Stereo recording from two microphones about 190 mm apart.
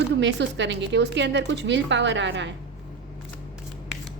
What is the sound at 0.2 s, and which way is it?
A woman's voice, 70° right (ahead or behind).